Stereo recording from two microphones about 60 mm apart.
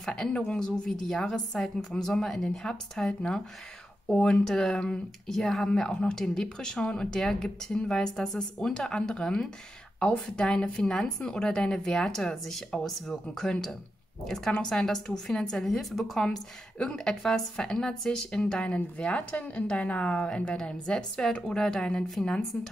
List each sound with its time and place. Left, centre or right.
0.0 s a woman's voice: centre